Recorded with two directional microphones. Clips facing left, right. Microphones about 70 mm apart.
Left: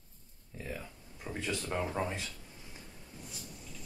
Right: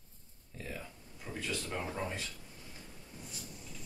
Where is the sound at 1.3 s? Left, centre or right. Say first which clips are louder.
Left 3 dB; left.